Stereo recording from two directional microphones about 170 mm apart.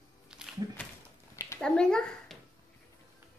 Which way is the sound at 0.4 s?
5° right (ahead or behind).